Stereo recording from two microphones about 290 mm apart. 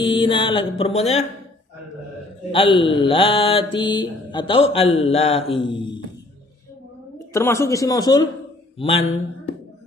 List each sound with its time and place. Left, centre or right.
0.0 s mantra: centre
2.5 s mantra: centre
7.3 s mantra: centre